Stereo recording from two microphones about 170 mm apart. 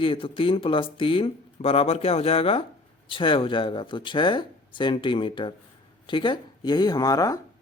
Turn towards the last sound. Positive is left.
turn(degrees=20)  # may be behind; listen again after turning